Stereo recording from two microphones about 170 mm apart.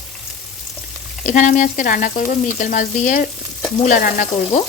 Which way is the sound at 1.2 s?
50° left (ahead or behind).